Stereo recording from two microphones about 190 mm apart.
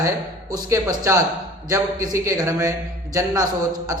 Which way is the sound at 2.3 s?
15° right (ahead or behind).